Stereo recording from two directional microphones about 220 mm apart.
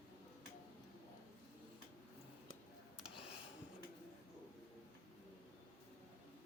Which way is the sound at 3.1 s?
25° left (ahead or behind).